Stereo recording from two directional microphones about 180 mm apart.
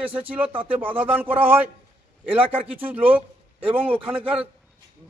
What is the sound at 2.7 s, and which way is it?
Speech, 10° right (ahead or behind).